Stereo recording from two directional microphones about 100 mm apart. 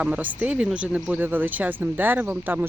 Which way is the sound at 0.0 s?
15° right (ahead or behind).